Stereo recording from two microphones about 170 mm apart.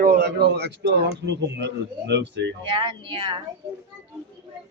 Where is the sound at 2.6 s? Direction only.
30° right (ahead or behind).